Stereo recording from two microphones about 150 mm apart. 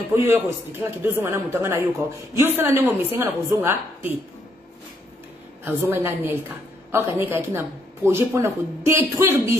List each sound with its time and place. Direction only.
0.2 s speech: 15° right (ahead or behind)
5.6 s speech: 15° right (ahead or behind)